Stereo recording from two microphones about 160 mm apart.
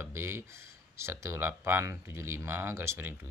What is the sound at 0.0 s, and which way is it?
Speech, 15° right (ahead or behind).